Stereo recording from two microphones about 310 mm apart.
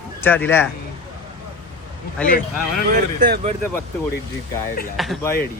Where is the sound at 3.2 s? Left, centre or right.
Right.